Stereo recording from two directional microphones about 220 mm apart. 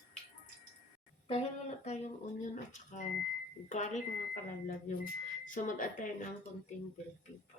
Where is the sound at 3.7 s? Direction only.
35° left (ahead or behind).